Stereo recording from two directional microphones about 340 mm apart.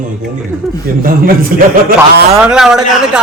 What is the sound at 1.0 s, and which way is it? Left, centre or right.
Speech, right.